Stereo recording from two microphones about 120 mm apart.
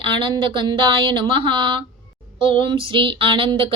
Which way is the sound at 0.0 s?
45° right (ahead or behind).